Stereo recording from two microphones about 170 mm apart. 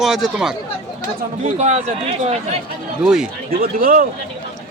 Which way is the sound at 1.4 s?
40° right (ahead or behind).